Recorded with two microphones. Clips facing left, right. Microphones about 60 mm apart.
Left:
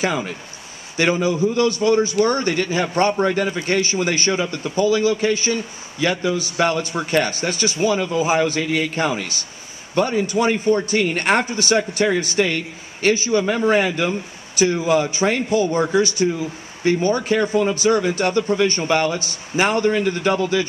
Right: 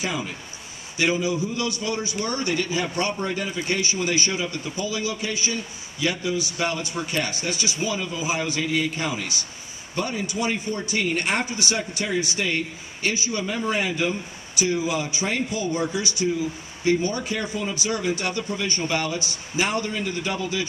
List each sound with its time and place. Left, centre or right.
0.0 s a man's voice: left
12.3 s a man's voice: left
13.3 s a man's voice: left
13.6 s a man's voice: left